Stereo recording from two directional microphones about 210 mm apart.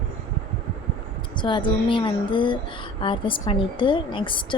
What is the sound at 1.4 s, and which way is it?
A woman's voice, 25° left (ahead or behind).